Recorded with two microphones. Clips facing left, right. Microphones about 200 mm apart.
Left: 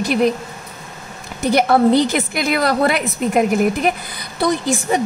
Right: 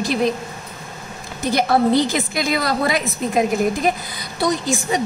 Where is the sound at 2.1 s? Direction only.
60° left (ahead or behind).